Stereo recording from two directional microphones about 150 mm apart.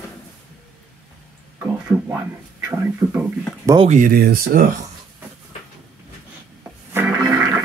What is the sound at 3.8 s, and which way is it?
Speech, 65° right (ahead or behind).